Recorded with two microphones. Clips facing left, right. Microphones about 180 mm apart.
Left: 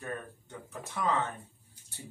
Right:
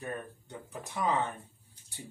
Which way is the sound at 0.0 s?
15° right (ahead or behind).